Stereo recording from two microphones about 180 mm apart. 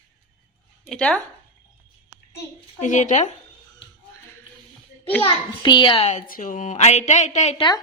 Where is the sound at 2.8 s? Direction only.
45° left (ahead or behind).